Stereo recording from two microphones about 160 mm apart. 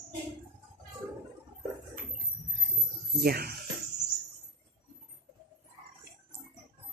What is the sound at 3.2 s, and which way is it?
Speech, 75° right (ahead or behind).